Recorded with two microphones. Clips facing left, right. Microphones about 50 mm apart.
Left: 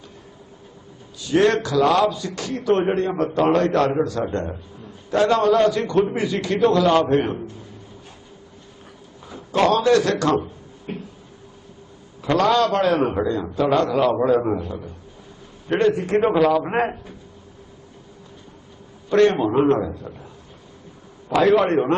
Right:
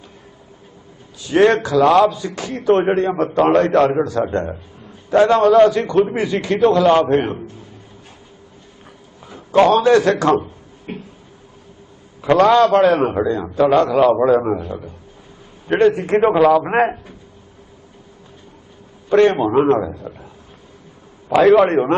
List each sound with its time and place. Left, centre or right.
1.3 s a man's voice: right
9.5 s a man's voice: centre
12.3 s a man's voice: right
19.1 s a man's voice: centre
21.3 s a man's voice: right